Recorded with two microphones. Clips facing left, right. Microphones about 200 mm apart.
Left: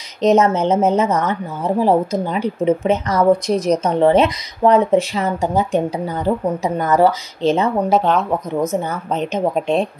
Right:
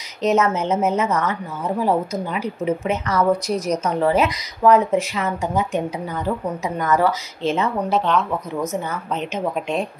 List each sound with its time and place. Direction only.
0.3 s speech: 30° left (ahead or behind)